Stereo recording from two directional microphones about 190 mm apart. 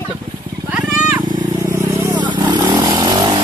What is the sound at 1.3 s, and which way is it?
Vehicle, 15° right (ahead or behind).